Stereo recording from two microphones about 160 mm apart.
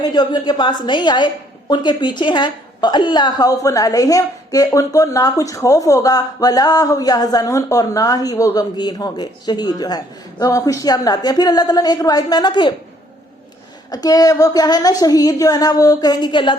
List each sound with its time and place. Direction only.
0.0 s a woman's voice: 25° left (ahead or behind)
13.9 s a woman's voice: 25° left (ahead or behind)